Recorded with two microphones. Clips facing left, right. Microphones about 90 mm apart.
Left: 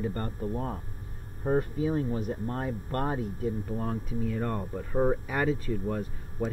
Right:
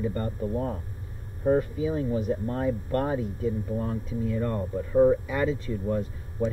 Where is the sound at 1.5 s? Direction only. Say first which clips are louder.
Right 3 dB; 45° left (ahead or behind).